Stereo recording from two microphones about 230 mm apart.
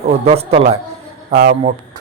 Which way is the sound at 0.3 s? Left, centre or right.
Right.